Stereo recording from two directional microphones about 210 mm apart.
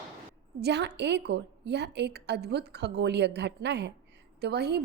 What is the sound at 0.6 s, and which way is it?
A woman's voice, 55° right (ahead or behind).